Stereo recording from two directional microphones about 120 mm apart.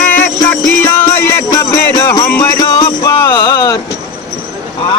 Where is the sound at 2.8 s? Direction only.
40° left (ahead or behind).